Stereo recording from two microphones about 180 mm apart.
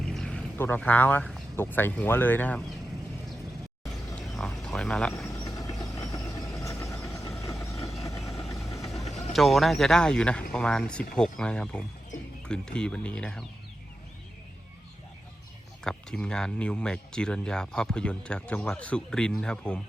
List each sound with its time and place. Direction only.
0.0 s a sound: 5° left (ahead or behind)
1.5 s speech: 10° left (ahead or behind)
4.4 s cricket: 5° left (ahead or behind)
5.3 s vehicle: 20° left (ahead or behind)
9.3 s speech: centre (ahead or behind)
15.8 s speech: 5° left (ahead or behind)